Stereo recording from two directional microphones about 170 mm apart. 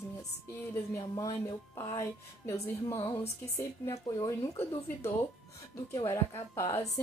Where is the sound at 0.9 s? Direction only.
20° left (ahead or behind).